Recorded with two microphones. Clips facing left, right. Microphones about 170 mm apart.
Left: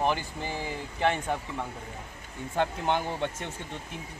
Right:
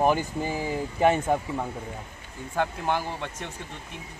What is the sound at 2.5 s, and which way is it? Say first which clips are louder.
Speech: right 1 dB; 25° left (ahead or behind).